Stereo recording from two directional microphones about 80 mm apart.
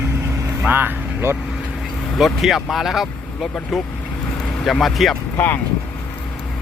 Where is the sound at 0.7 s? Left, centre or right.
Right.